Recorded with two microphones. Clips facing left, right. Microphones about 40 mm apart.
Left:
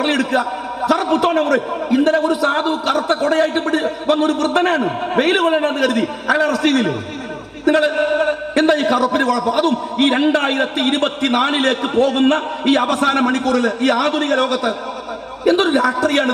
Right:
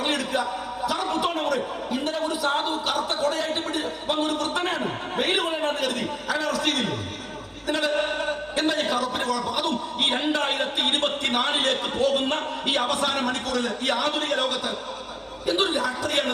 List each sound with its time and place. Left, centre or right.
0.0 s a man's voice: left
7.6 s a sound: left
8.6 s a man's voice: left